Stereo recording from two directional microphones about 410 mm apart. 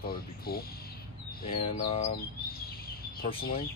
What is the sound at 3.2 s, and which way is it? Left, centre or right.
Speech, left.